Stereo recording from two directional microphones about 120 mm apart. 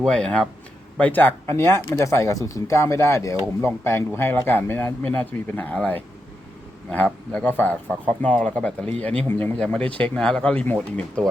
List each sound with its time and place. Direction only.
0.0 s speech: 10° left (ahead or behind)